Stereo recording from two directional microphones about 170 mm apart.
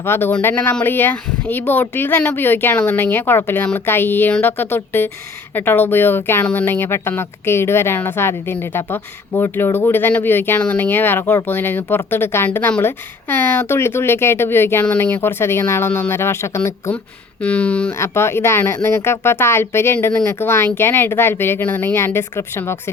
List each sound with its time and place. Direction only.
0.0 s speech: 15° left (ahead or behind)